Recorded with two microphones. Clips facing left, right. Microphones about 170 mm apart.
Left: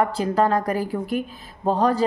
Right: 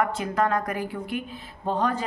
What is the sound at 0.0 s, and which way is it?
Speech, 35° left (ahead or behind).